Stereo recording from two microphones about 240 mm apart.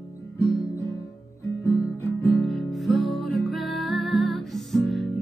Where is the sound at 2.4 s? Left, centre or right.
Centre.